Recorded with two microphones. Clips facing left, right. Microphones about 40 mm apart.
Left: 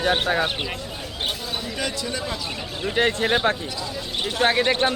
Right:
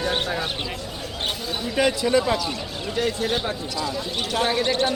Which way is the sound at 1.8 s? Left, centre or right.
Right.